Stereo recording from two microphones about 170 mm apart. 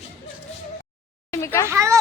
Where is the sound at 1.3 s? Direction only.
15° left (ahead or behind).